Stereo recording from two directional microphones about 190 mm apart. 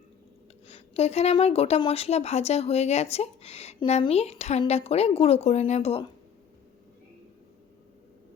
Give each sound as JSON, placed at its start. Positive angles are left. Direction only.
{"t": 0.7, "sound": "speech", "side_deg": 35}